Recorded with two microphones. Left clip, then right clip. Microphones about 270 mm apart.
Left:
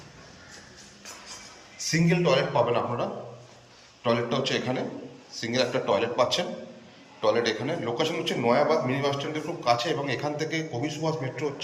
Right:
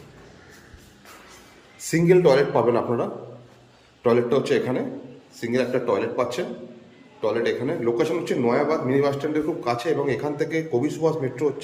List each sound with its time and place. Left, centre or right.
1.9 s a man's voice: centre